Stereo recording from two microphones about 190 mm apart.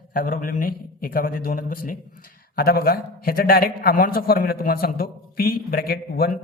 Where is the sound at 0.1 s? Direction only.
45° left (ahead or behind).